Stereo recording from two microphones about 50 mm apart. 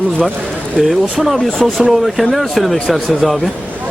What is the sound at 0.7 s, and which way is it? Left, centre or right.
Speech, centre.